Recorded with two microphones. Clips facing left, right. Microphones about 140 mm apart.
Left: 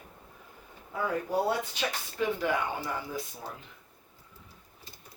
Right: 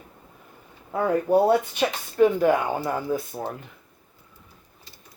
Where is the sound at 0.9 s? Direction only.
55° right (ahead or behind).